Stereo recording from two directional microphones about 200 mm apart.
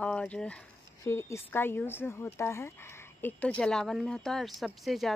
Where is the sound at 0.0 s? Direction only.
5° left (ahead or behind).